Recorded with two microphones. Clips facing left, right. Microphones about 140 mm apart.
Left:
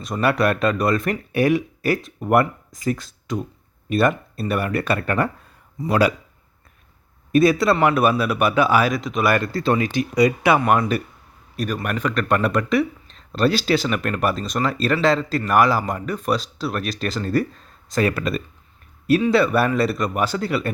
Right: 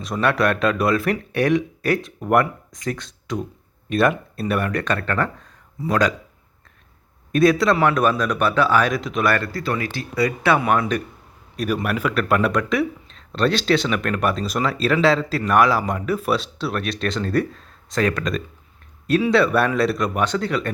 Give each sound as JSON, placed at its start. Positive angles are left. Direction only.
{"t": 0.0, "sound": "speech", "side_deg": 0}
{"t": 7.3, "sound": "speech", "side_deg": 5}
{"t": 8.9, "sound": "speech", "side_deg": 0}
{"t": 9.5, "sound": "speech", "side_deg": 25}